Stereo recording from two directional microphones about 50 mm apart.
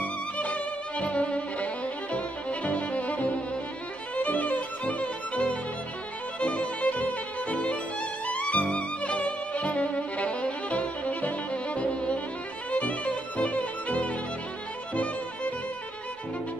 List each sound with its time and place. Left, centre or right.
0.0 s violin: left
2.1 s music: left
4.2 s violin: left